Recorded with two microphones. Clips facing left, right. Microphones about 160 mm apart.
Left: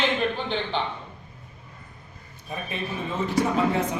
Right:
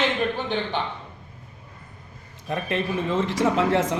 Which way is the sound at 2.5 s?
90° right.